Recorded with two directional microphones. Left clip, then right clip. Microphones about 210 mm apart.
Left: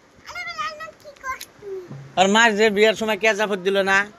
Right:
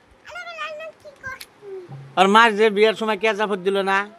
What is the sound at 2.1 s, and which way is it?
A man's voice, 25° right (ahead or behind).